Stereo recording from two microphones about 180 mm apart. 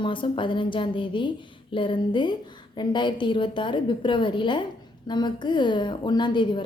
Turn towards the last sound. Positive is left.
turn(degrees=25)  # may be behind; listen again after turning